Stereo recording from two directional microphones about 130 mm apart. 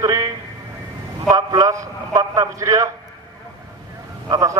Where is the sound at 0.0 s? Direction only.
25° right (ahead or behind).